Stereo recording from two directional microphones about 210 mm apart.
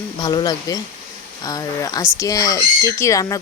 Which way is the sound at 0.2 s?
20° left (ahead or behind).